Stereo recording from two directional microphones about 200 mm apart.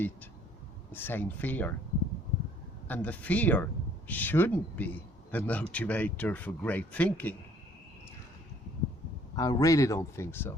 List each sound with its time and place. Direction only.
0.9 s speech: 10° left (ahead or behind)
2.8 s speech: 10° left (ahead or behind)
9.3 s speech: 20° left (ahead or behind)